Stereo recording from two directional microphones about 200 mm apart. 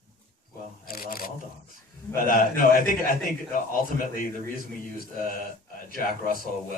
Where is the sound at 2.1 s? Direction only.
45° left (ahead or behind).